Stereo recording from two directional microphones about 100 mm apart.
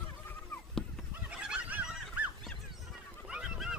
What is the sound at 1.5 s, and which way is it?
Fowl, 15° right (ahead or behind).